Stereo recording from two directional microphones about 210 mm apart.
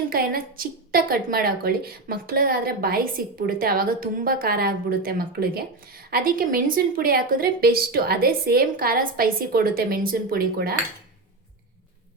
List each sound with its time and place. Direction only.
0.1 s a woman's voice: 45° right (ahead or behind)